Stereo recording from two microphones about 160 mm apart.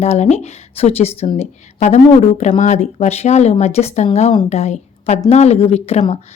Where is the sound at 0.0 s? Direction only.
40° left (ahead or behind).